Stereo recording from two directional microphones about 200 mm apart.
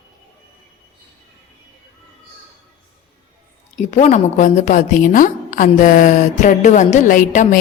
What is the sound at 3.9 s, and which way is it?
A woman's voice, 35° left (ahead or behind).